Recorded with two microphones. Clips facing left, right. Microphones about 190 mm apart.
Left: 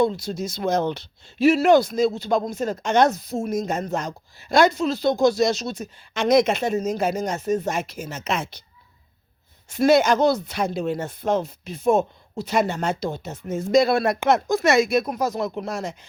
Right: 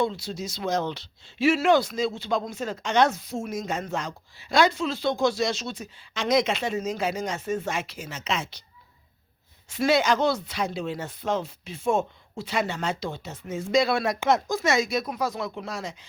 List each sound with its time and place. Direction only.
0.0 s speech: 45° left (ahead or behind)
1.5 s speech: 40° left (ahead or behind)
9.6 s speech: 45° left (ahead or behind)
14.0 s speech: 60° left (ahead or behind)